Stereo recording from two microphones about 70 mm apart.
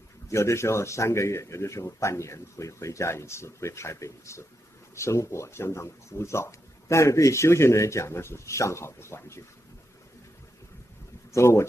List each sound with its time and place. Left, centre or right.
0.3 s speech: left
11.3 s speech: left